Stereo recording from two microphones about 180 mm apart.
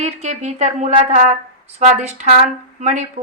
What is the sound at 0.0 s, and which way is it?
A woman's voice, 40° right (ahead or behind).